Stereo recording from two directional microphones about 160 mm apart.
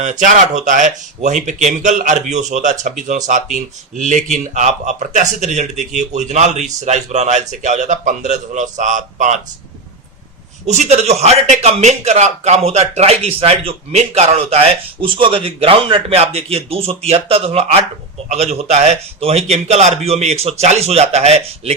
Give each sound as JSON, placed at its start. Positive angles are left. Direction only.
{"t": 0.0, "sound": "speech", "side_deg": -50}
{"t": 10.7, "sound": "a man's voice", "side_deg": -45}